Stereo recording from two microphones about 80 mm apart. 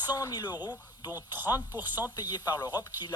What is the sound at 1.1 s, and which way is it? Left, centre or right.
Speech, right.